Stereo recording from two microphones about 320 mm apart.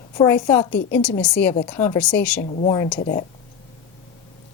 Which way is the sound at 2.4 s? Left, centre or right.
Left.